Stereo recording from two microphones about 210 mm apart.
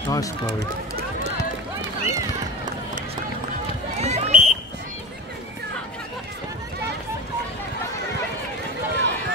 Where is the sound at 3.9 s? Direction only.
30° right (ahead or behind).